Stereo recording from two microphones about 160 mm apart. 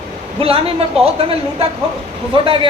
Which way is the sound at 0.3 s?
35° right (ahead or behind).